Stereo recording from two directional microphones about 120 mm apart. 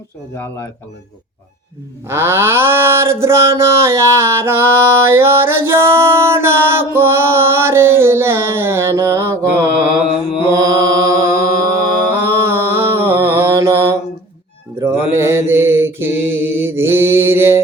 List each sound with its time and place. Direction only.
0.3 s speech: 25° left (ahead or behind)
2.0 s mantra: 20° right (ahead or behind)